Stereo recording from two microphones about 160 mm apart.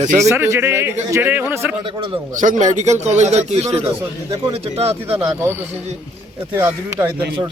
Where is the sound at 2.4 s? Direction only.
50° right (ahead or behind).